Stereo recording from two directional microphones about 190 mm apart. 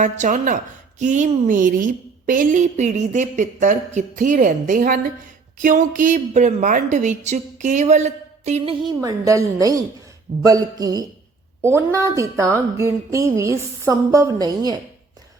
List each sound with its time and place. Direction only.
0.0 s a woman's voice: 40° right (ahead or behind)
8.8 s a woman's voice: 20° right (ahead or behind)